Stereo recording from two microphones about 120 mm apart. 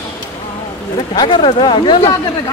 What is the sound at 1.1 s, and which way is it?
Speech, 45° left (ahead or behind).